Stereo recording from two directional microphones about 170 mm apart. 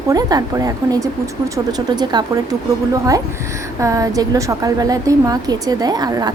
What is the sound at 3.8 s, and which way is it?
A woman's voice, 20° right (ahead or behind).